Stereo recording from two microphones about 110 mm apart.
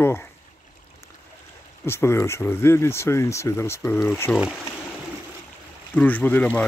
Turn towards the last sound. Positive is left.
turn(degrees=15)  # may be behind; listen again after turning